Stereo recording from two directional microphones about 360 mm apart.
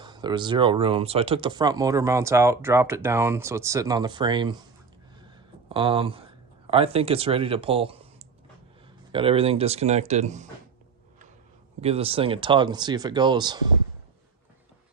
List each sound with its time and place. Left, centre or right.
0.0 s speech: centre
5.6 s speech: centre
11.8 s speech: centre